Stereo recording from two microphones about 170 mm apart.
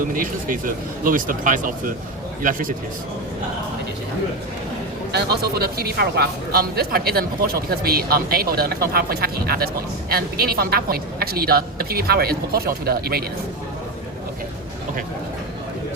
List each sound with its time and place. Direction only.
0.1 s speech: 55° right (ahead or behind)
5.1 s speech: 70° right (ahead or behind)